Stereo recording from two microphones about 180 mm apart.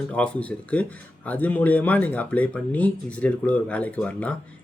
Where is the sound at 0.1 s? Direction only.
5° left (ahead or behind).